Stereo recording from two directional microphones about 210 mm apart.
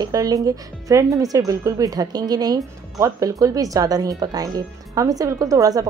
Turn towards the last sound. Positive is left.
turn(degrees=-15)  # may be behind; listen again after turning